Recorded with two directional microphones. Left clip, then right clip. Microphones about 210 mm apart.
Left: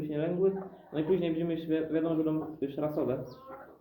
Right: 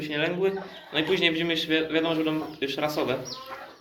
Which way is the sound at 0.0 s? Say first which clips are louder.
Right 4 dB; 30° left (ahead or behind).